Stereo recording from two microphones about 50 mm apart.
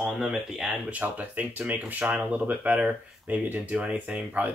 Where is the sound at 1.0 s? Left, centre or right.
Right.